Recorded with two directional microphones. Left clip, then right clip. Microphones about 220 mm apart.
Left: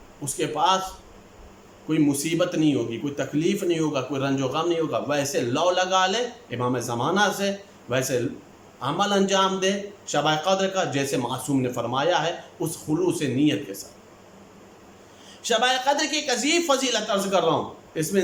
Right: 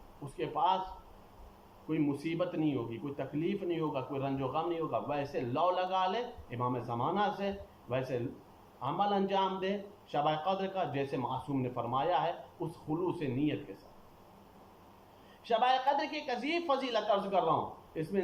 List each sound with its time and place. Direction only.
0.3 s speech: 45° left (ahead or behind)
1.9 s speech: 45° left (ahead or behind)
15.4 s speech: 40° left (ahead or behind)